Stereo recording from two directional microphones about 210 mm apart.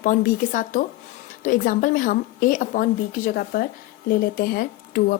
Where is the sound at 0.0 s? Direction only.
40° left (ahead or behind).